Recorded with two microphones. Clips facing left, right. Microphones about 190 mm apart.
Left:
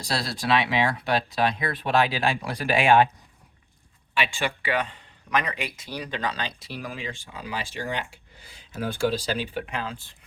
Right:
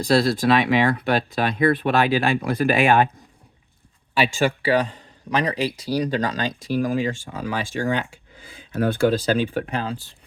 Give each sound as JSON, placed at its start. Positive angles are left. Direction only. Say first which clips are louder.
{"t": 0.0, "sound": "speech", "louder": "right 11 dB", "side_deg": -55}
{"t": 4.1, "sound": "a man's voice", "louder": "right 7 dB", "side_deg": -40}
{"t": 8.5, "sound": "speech", "louder": "right 8 dB", "side_deg": -60}